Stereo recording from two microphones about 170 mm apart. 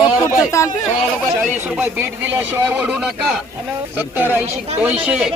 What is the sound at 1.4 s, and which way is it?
A man's voice, 5° right (ahead or behind).